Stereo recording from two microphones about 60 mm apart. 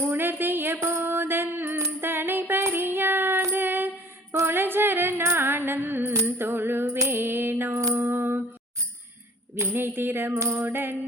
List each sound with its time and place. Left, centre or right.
0.0 s a sound: right
0.8 s music: right
1.0 s mantra: right
2.0 s music: right
2.6 s child singing: right
3.5 s mantra: right
4.4 s singing: right
5.2 s music: right
7.9 s mantra: right
9.6 s a sound: right